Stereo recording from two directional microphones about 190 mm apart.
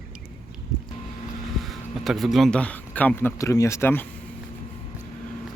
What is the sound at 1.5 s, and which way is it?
Speech, centre (ahead or behind).